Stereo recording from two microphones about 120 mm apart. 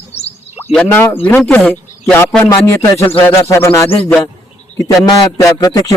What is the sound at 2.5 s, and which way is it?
Speech, 30° left (ahead or behind).